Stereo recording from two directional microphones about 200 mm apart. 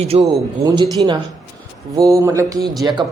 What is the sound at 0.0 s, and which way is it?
Speech, 30° right (ahead or behind).